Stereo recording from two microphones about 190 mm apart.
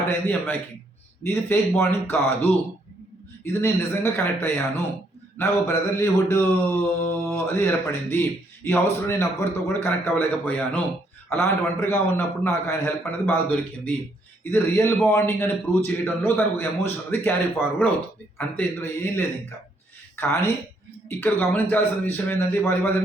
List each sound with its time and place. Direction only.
0.1 s a man's voice: 10° left (ahead or behind)
14.5 s a man's voice: 15° left (ahead or behind)